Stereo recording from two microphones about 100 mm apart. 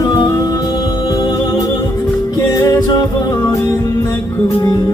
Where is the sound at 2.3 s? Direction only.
35° left (ahead or behind).